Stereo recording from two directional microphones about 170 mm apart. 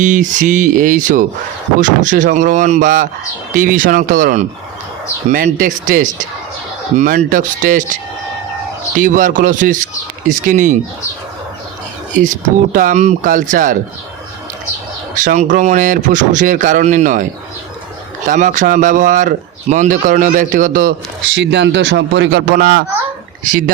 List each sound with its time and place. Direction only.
0.0 s speech: 50° right (ahead or behind)
6.9 s speech: 45° right (ahead or behind)
9.0 s speech: 50° right (ahead or behind)
12.1 s speech: 50° right (ahead or behind)
15.1 s speech: 50° right (ahead or behind)
18.3 s speech: 50° right (ahead or behind)
21.3 s a man's voice: 90° right; by 22.8 s 65° right (ahead or behind)
23.4 s speech: 50° right (ahead or behind)